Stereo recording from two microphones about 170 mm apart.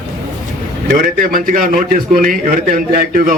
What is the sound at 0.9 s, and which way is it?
A man's voice, 55° right (ahead or behind).